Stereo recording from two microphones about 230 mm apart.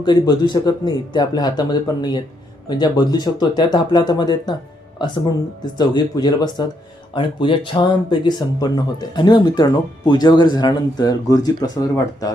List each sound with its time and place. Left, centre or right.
0.0 s speech: centre
5.6 s speech: centre